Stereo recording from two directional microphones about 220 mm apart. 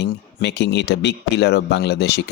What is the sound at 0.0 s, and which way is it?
Speech, 50° left (ahead or behind).